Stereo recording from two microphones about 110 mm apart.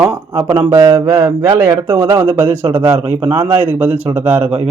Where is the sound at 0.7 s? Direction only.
30° right (ahead or behind).